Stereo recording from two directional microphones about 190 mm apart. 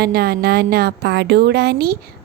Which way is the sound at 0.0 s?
55° right (ahead or behind).